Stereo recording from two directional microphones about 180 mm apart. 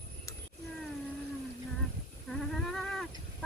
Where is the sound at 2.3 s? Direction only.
Centre (ahead or behind).